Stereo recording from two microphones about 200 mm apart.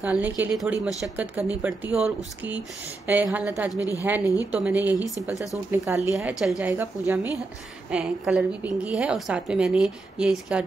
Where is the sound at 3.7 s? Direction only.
15° left (ahead or behind).